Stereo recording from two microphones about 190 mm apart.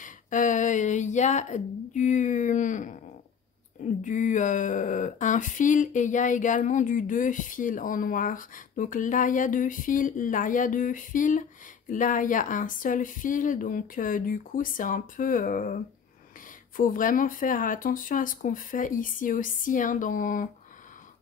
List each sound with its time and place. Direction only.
0.0 s speech: 40° left (ahead or behind)
4.0 s speech: 40° left (ahead or behind)